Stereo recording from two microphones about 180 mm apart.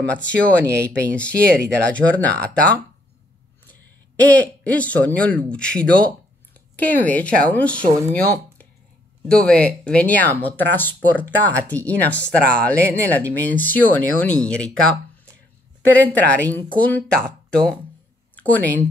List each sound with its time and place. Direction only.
0.0 s speech: 5° left (ahead or behind)
0.7 s speech: 15° right (ahead or behind)
1.1 s speech: 5° left (ahead or behind)